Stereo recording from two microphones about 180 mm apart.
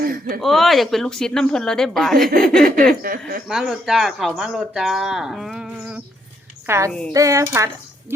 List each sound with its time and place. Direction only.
0.0 s a sound: 55° right (ahead or behind)
0.4 s speech: centre (ahead or behind)
3.0 s speech: 55° right (ahead or behind)
3.5 s speech: centre (ahead or behind)
6.7 s speech: 15° right (ahead or behind)